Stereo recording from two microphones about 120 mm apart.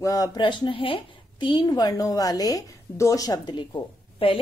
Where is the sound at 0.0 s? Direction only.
30° left (ahead or behind).